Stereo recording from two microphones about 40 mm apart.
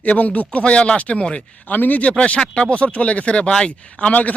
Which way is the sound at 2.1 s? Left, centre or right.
Left.